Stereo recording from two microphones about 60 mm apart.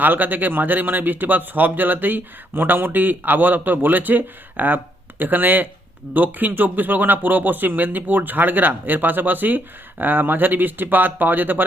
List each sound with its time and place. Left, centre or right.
0.0 s speech: right